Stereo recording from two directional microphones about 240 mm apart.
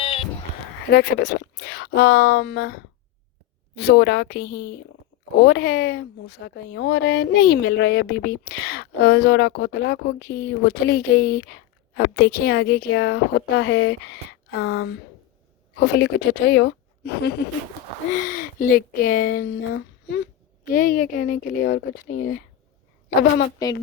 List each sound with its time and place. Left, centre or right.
0.0 s sheep: left
0.9 s a woman's voice: left